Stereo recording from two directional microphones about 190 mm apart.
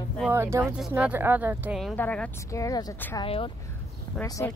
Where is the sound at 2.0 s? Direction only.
5° left (ahead or behind).